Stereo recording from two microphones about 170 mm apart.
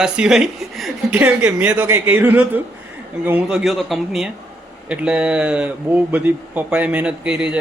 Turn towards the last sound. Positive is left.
turn(degrees=-5)  # may be behind; listen again after turning